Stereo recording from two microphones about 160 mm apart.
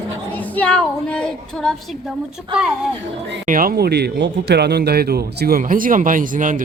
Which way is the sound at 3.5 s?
65° right (ahead or behind).